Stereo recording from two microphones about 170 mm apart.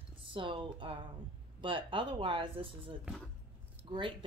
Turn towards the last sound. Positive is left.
turn(degrees=-30)  # may be behind; listen again after turning